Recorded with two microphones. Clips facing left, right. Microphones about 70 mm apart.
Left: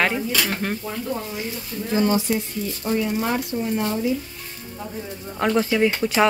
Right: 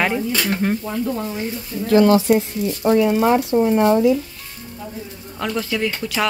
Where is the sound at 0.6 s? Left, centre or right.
Centre.